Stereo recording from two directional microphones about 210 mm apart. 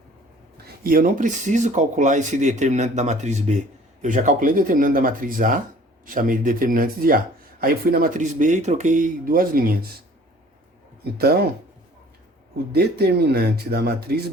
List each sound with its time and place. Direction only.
0.5 s speech: 45° right (ahead or behind)
12.7 s speech: 50° right (ahead or behind)